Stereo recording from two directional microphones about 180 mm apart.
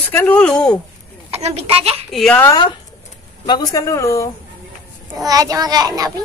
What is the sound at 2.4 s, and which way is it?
A woman's voice, 20° left (ahead or behind).